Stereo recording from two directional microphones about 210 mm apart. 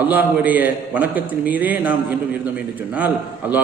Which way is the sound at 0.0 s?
10° right (ahead or behind).